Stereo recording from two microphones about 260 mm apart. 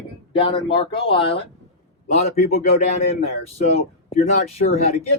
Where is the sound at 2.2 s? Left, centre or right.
Left.